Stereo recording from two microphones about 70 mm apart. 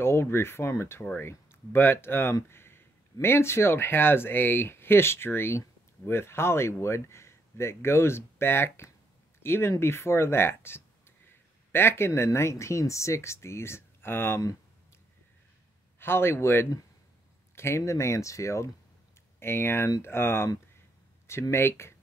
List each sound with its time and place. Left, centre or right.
0.0 s speech: left
16.0 s speech: left